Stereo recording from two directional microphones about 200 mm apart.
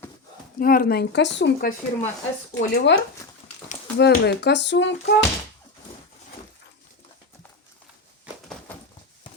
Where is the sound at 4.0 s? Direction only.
55° left (ahead or behind).